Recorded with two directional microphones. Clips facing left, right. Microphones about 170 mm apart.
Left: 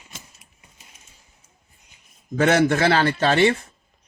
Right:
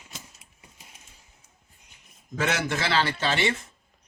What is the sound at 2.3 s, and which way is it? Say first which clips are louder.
A man's voice: left 10 dB; 55° left (ahead or behind).